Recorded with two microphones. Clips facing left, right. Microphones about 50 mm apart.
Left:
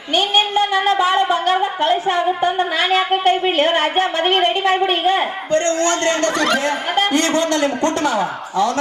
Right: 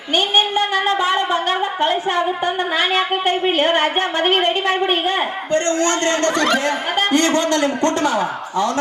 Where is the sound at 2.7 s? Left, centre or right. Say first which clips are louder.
Left 1 dB; centre.